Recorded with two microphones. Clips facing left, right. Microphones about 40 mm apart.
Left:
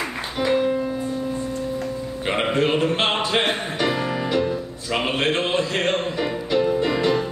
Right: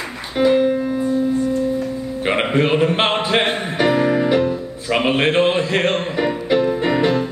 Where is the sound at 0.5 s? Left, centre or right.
Centre.